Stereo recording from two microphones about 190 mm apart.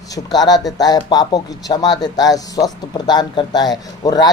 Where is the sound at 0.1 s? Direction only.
20° left (ahead or behind).